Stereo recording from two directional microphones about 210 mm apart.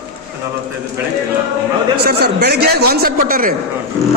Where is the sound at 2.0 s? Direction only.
50° right (ahead or behind).